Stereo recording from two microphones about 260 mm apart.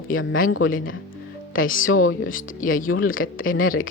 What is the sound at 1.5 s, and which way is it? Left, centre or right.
Speech, left.